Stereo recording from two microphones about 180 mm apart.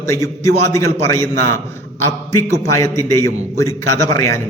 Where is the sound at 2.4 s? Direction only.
15° left (ahead or behind).